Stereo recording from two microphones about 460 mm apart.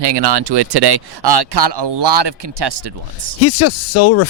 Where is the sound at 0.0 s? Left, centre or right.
Right.